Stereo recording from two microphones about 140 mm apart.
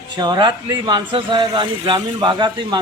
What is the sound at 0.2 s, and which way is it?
Speech, 30° right (ahead or behind).